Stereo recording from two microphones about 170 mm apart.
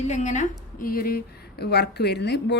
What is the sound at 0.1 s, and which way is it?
A woman's voice, 45° left (ahead or behind).